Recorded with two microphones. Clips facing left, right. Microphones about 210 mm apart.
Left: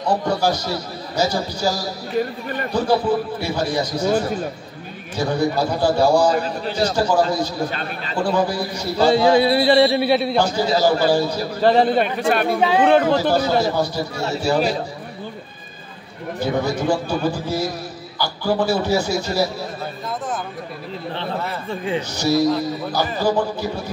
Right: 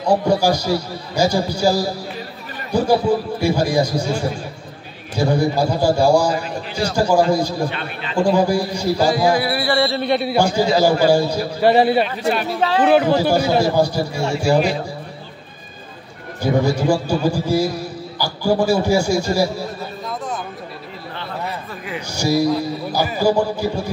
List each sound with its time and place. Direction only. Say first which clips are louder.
0.0 s a man's voice: right 4 dB; 10° right (ahead or behind)
5.1 s a man's voice: right 2 dB; 10° right (ahead or behind)
7.7 s a man's voice: even; 40° left (ahead or behind)
8.2 s a man's voice: right 4 dB; 10° right (ahead or behind)
9.0 s speech: left 4 dB; 25° left (ahead or behind)
10.0 s a man's voice: left 1 dB; centre (ahead or behind)
10.3 s a man's voice: right 2 dB; 10° right (ahead or behind)
12.2 s speech: left 2 dB; 55° left (ahead or behind)
12.8 s a man's voice: right 3 dB; 10° right (ahead or behind)
16.3 s a man's voice: right 3 dB; 10° right (ahead or behind)
22.1 s a man's voice: right 2 dB; 10° right (ahead or behind)